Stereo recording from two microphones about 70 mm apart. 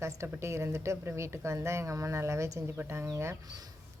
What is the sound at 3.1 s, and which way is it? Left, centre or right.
Speech, right.